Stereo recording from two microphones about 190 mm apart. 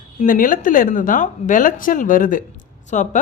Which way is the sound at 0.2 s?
45° left (ahead or behind).